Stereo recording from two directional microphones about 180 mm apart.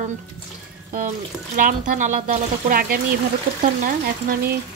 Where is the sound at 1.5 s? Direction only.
45° right (ahead or behind).